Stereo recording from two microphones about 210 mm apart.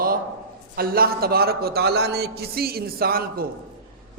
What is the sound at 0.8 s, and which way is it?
A man's voice, 45° right (ahead or behind).